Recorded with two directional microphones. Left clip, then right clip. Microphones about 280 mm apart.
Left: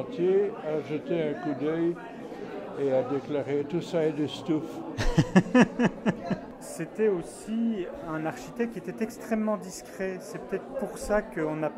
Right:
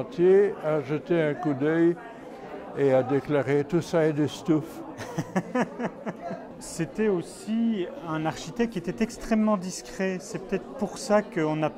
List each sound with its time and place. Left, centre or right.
0.2 s speech: right
4.9 s chuckle: left
6.8 s speech: right